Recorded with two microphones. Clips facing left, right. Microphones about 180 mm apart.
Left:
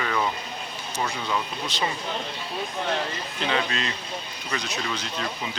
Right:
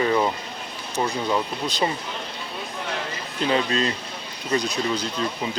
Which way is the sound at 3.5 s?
35° right (ahead or behind).